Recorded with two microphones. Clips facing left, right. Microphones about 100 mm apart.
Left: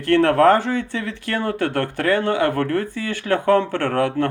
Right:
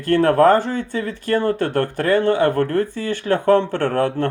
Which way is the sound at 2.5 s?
20° right (ahead or behind).